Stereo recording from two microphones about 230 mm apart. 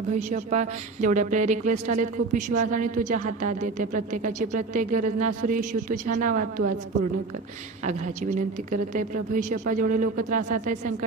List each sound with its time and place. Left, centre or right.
0.1 s a woman's voice: right
9.1 s a woman's voice: right